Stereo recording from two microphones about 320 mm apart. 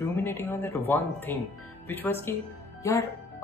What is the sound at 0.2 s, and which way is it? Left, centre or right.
Speech, centre.